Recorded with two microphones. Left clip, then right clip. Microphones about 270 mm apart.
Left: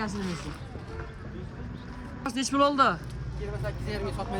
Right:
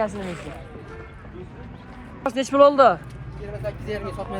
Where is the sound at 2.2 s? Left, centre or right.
Centre.